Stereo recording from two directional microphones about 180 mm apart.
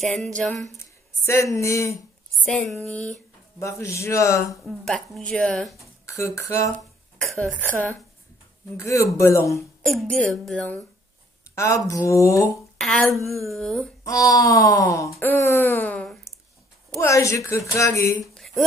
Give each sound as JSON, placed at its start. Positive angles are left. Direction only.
{"t": 0.0, "sound": "speech", "side_deg": 0}
{"t": 0.7, "sound": "speech", "side_deg": 15}
{"t": 2.4, "sound": "speech", "side_deg": 5}
{"t": 3.5, "sound": "a woman's voice", "side_deg": 15}
{"t": 4.6, "sound": "speech", "side_deg": 0}
{"t": 5.8, "sound": "speech", "side_deg": 15}
{"t": 7.2, "sound": "a woman's voice", "side_deg": 0}
{"t": 9.8, "sound": "a woman's voice", "side_deg": 0}
{"t": 12.7, "sound": "speech", "side_deg": 5}
{"t": 14.0, "sound": "a woman's voice", "side_deg": 20}
{"t": 18.3, "sound": "a sound", "side_deg": 0}